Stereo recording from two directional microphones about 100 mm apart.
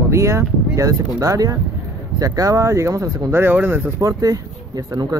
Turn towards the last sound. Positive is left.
turn(degrees=-40)  # may be behind; listen again after turning